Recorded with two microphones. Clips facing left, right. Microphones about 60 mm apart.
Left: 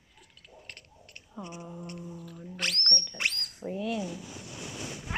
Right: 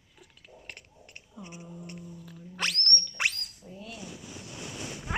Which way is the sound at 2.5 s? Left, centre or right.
Centre.